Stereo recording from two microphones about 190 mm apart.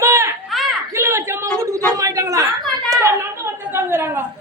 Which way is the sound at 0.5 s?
Centre (ahead or behind).